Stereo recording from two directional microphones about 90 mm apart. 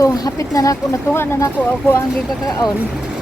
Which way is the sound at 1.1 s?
30° left (ahead or behind).